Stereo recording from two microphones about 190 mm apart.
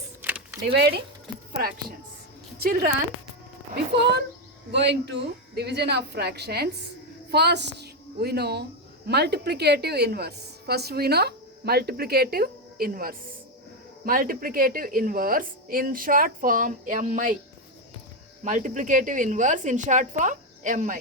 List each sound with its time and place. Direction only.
0.3 s a sound: 10° right (ahead or behind)
0.6 s a woman's voice: 60° right (ahead or behind)
2.6 s a woman's voice: 50° right (ahead or behind)
3.9 s a woman's voice: 60° right (ahead or behind); by 17.3 s 45° right (ahead or behind)
18.4 s a woman's voice: 40° right (ahead or behind)